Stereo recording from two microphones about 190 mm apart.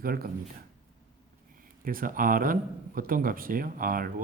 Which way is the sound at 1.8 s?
50° right (ahead or behind).